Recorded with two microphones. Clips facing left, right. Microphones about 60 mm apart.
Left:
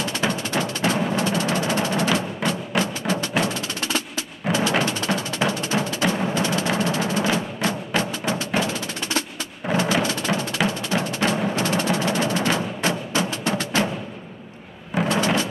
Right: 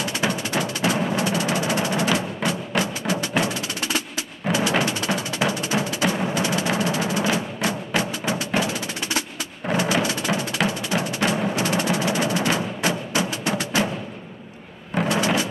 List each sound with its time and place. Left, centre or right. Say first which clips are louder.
0.0 s music: even; centre
8.5 s wood block: even; centre
9.6 s music: left 1 dB; centre
10.0 s music: even; centre
15.0 s a sound: even; centre